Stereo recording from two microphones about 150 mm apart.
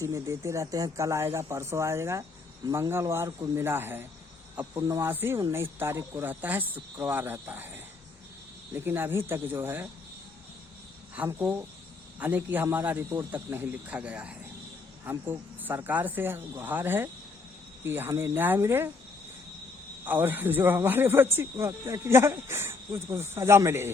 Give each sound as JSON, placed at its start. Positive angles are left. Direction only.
{"t": 0.0, "sound": "speech", "side_deg": -20}
{"t": 8.7, "sound": "speech", "side_deg": -15}
{"t": 11.1, "sound": "speech", "side_deg": -10}
{"t": 20.1, "sound": "speech", "side_deg": -10}